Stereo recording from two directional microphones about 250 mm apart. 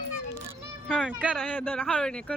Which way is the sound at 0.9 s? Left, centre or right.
Centre.